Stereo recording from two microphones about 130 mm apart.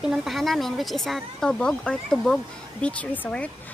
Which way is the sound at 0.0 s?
5° right (ahead or behind).